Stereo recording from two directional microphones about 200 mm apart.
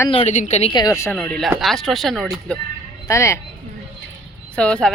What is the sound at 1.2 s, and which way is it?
Speech, 5° left (ahead or behind).